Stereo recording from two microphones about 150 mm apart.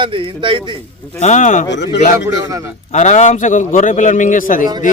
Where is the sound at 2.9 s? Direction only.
55° left (ahead or behind).